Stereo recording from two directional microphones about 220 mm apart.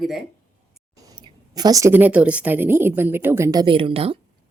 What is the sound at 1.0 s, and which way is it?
A woman's voice, 20° right (ahead or behind).